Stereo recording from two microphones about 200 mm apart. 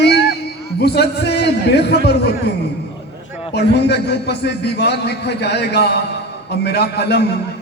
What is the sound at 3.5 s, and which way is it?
A man's voice, 55° left (ahead or behind).